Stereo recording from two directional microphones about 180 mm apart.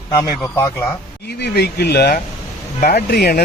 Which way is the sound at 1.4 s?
65° left (ahead or behind).